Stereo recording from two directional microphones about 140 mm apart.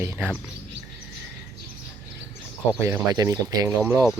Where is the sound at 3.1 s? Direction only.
25° right (ahead or behind).